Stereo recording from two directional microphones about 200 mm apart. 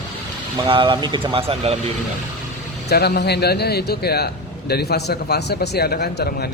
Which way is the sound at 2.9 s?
55° left (ahead or behind).